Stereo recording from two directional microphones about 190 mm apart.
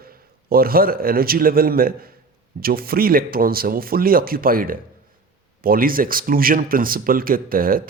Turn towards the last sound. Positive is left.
turn(degrees=-50)  # may be behind; listen again after turning